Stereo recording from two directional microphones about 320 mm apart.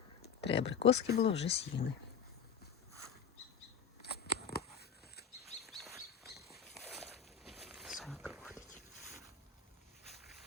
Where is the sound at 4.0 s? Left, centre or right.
Left.